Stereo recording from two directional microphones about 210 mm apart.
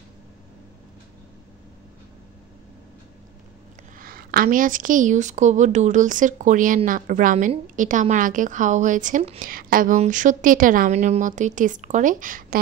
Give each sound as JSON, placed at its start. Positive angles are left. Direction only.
{"t": 4.0, "sound": "a woman's voice", "side_deg": -45}